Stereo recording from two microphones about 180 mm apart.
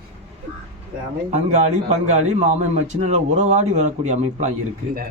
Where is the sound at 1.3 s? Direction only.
40° right (ahead or behind).